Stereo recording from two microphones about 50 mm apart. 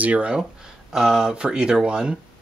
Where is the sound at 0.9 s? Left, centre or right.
Centre.